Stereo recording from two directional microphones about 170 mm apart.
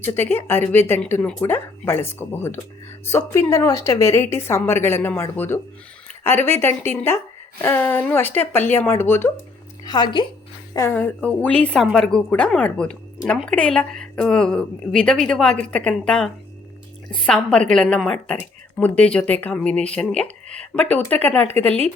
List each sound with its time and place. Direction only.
0.0 s speech: 15° left (ahead or behind)
9.8 s a woman's voice: 25° left (ahead or behind)
10.8 s a woman's voice: 15° left (ahead or behind)